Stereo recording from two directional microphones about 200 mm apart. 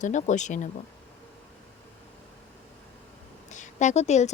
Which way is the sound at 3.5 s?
35° left (ahead or behind).